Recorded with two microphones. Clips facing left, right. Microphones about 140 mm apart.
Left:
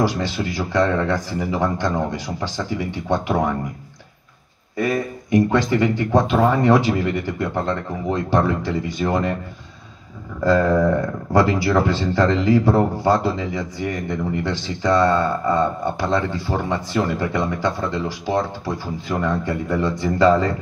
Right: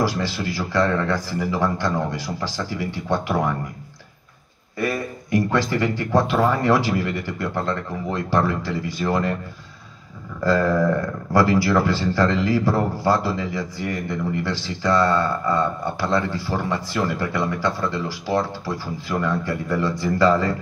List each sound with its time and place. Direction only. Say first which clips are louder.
0.0 s speech: left 2 dB; 20° left (ahead or behind)
4.7 s speech: left 3 dB; 20° left (ahead or behind)
10.4 s speech: left 2 dB; 20° left (ahead or behind)